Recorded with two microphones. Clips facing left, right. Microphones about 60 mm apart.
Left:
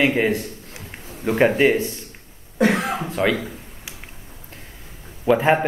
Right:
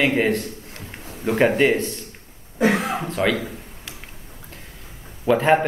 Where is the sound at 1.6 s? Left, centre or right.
Centre.